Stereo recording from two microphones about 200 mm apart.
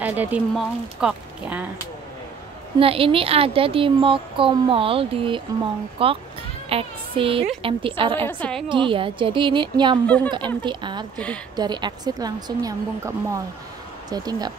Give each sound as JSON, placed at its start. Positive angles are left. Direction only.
{"t": 0.0, "sound": "speech", "side_deg": -10}
{"t": 2.8, "sound": "a woman's voice", "side_deg": -25}
{"t": 8.3, "sound": "a woman's voice", "side_deg": 5}
{"t": 8.6, "sound": "a woman's voice", "side_deg": -25}
{"t": 10.0, "sound": "a woman's voice", "side_deg": 5}
{"t": 10.3, "sound": "a woman's voice", "side_deg": -25}